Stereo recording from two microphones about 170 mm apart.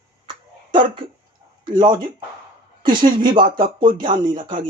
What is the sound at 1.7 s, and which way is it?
Speech, 25° right (ahead or behind).